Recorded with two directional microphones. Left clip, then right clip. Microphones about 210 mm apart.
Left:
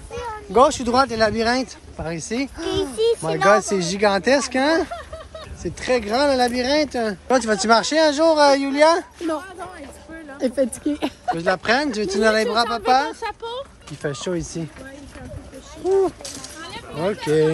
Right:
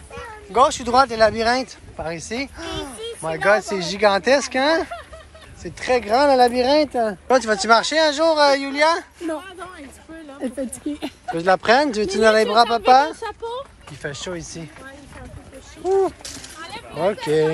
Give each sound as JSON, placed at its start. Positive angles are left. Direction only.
{"t": 0.5, "sound": "speech", "side_deg": 15}
{"t": 7.2, "sound": "speech", "side_deg": 10}
{"t": 10.9, "sound": "speech", "side_deg": 5}
{"t": 13.2, "sound": "a sound", "side_deg": -40}
{"t": 14.0, "sound": "speech", "side_deg": 15}
{"t": 15.9, "sound": "speech", "side_deg": 10}
{"t": 16.6, "sound": "a sound", "side_deg": -25}
{"t": 17.0, "sound": "speech", "side_deg": 5}